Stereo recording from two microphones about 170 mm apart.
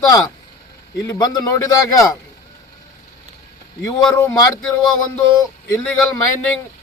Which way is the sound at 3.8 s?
15° left (ahead or behind).